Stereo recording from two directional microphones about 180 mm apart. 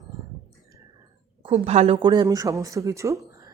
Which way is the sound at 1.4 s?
35° right (ahead or behind).